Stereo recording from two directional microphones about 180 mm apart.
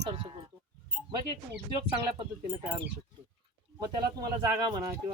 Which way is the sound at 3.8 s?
25° right (ahead or behind).